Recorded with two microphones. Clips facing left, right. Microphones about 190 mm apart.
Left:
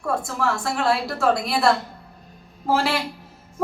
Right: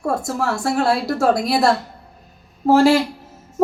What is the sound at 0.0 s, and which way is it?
Speech, 40° right (ahead or behind).